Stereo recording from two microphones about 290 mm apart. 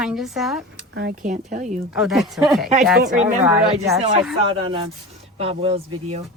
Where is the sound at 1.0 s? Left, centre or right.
Right.